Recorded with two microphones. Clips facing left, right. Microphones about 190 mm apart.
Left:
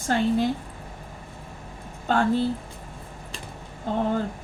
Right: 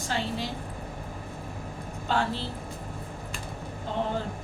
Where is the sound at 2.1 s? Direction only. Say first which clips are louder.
Left 6 dB; 50° left (ahead or behind).